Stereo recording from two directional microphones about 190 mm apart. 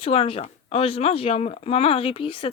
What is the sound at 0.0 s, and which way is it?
Speech, 30° left (ahead or behind).